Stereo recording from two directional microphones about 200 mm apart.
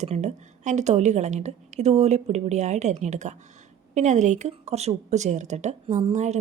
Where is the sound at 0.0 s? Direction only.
35° right (ahead or behind).